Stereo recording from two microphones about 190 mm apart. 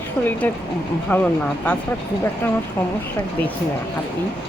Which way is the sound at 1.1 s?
5° left (ahead or behind).